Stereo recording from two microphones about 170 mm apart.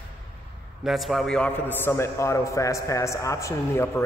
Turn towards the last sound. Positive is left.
turn(degrees=15)  # may be behind; listen again after turning